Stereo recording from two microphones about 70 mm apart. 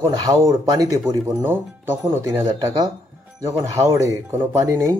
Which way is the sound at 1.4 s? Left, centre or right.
Right.